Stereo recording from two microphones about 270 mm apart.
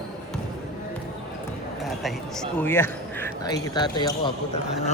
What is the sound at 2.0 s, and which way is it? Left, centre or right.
A man's voice, centre.